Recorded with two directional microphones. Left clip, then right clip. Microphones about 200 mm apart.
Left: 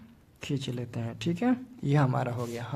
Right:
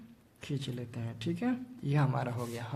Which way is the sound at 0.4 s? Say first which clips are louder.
Left 5 dB; 30° left (ahead or behind).